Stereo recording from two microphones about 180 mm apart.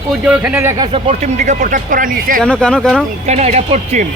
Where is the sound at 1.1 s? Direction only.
40° right (ahead or behind).